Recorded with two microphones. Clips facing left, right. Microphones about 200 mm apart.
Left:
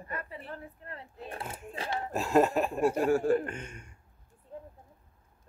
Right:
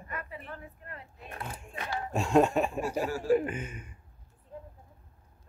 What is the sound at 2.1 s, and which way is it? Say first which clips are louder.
Laughter: right 1 dB; centre (ahead or behind).